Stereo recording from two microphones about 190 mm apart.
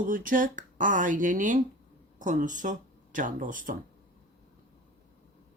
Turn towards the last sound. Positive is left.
turn(degrees=-45)  # may be behind; listen again after turning